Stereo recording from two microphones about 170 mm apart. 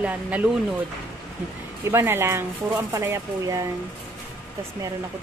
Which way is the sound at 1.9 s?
15° right (ahead or behind).